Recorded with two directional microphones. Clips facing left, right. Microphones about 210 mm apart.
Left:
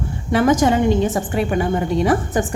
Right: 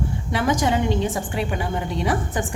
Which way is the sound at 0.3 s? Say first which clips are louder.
Left 7 dB; 45° left (ahead or behind).